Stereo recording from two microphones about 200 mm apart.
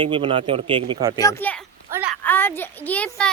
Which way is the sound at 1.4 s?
5° left (ahead or behind).